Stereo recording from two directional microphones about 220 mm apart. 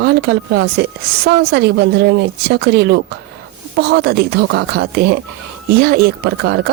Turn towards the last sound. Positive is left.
turn(degrees=-50)  # may be behind; listen again after turning